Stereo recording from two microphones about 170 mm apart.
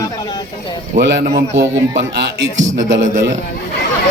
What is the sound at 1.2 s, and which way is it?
Speech, 45° right (ahead or behind).